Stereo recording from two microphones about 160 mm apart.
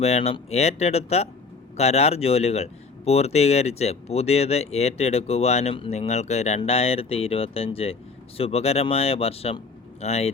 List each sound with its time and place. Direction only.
0.0 s speech: 40° left (ahead or behind)